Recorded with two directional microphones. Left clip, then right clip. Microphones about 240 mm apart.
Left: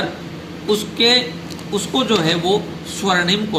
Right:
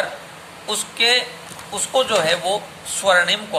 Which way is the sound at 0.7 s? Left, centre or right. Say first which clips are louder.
Left 3 dB; right.